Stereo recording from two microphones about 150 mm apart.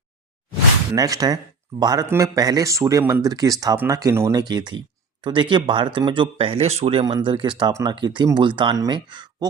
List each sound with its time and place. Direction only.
0.9 s speech: 25° right (ahead or behind); by 7.0 s 45° right (ahead or behind)
7.0 s speech: 35° right (ahead or behind)